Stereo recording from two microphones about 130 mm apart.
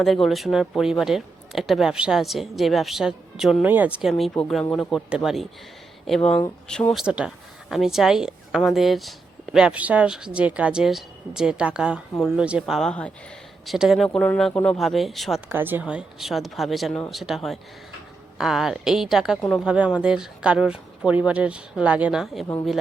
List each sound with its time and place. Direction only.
0.0 s speech: centre (ahead or behind)
4.2 s speech: centre (ahead or behind)
7.0 s speech: 5° right (ahead or behind)
12.9 s speech: 10° left (ahead or behind)
13.7 s speech: 5° right (ahead or behind)
15.4 s speech: 15° right (ahead or behind); by 19.6 s 5° left (ahead or behind)
19.6 s speech: 5° right (ahead or behind)